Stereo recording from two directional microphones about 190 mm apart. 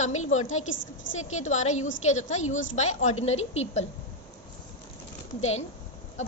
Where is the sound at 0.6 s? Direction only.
80° left.